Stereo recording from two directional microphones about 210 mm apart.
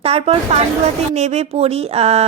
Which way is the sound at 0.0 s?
30° right (ahead or behind).